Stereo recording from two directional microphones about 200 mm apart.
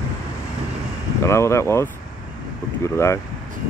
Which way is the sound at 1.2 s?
15° left (ahead or behind).